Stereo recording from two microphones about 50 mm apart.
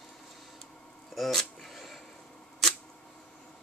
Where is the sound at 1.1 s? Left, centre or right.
Centre.